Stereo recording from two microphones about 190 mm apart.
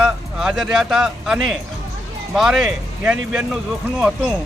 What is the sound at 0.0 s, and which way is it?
Speech, 5° right (ahead or behind).